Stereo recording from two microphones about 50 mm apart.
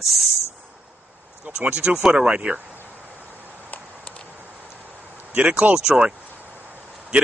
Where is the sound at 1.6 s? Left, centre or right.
Centre.